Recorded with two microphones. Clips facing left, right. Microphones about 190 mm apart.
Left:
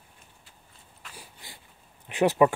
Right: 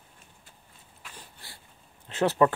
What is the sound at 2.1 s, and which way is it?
Speech, 15° left (ahead or behind).